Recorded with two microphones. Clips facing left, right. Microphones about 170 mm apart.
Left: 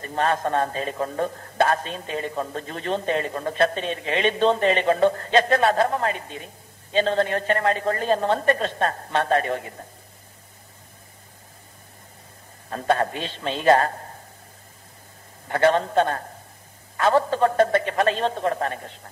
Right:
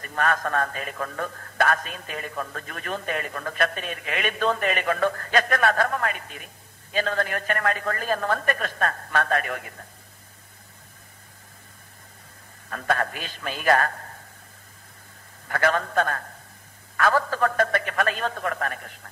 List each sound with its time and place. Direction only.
0.0 s a man's voice: 25° left (ahead or behind)
12.6 s a man's voice: 25° left (ahead or behind)
15.4 s a man's voice: 25° left (ahead or behind)